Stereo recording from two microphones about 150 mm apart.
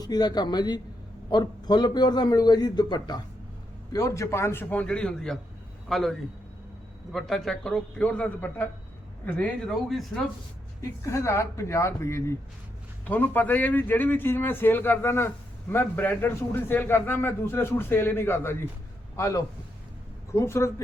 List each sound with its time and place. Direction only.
0.0 s a man's voice: 30° left (ahead or behind); by 10.1 s centre (ahead or behind)
10.8 s a man's voice: 20° left (ahead or behind)